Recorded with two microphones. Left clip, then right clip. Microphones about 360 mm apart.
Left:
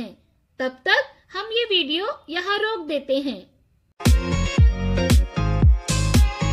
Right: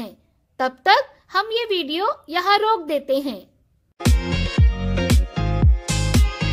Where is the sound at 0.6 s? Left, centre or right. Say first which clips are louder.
Right 4 dB; right.